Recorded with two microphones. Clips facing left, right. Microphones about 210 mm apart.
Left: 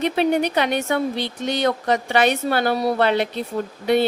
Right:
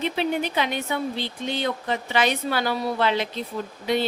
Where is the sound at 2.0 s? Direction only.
55° left (ahead or behind).